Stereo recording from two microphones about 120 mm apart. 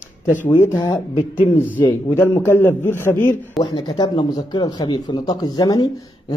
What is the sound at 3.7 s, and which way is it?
Speech, 35° left (ahead or behind).